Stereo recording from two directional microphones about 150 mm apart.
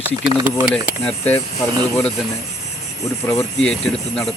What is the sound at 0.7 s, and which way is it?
Speech, 10° left (ahead or behind).